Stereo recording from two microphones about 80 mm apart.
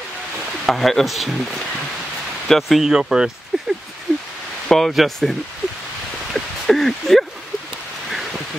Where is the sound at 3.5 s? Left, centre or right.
Centre.